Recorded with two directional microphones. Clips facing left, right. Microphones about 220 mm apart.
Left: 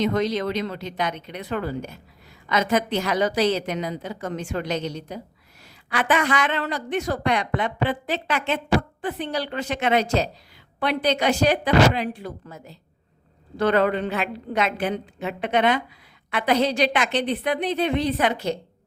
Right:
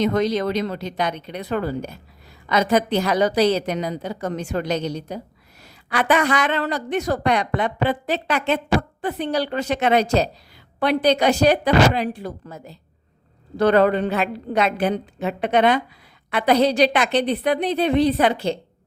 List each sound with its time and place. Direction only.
0.0 s a woman's voice: 40° right (ahead or behind)